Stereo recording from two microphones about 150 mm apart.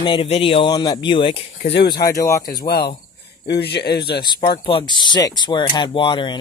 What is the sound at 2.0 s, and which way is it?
Speech, 20° left (ahead or behind).